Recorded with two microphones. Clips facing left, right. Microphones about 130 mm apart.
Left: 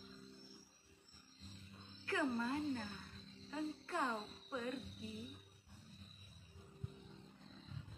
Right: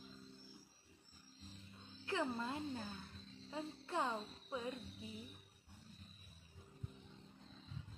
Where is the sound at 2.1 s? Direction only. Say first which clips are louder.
Left 2 dB; 20° right (ahead or behind).